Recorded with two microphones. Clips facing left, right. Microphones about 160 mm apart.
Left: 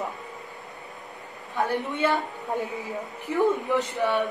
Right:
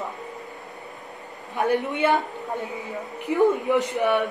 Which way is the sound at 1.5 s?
15° right (ahead or behind).